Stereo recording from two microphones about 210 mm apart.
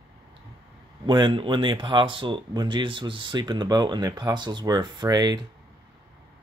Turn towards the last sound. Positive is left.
turn(degrees=-20)  # may be behind; listen again after turning